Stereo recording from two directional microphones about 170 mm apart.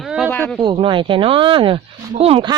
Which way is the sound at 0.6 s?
30° right (ahead or behind).